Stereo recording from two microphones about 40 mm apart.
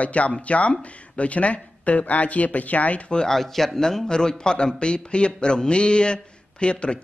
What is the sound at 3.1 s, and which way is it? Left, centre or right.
A man's voice, centre.